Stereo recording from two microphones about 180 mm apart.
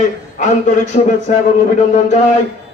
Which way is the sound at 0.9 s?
35° left (ahead or behind).